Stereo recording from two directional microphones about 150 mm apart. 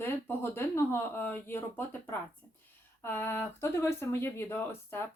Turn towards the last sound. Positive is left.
turn(degrees=15)  # may be behind; listen again after turning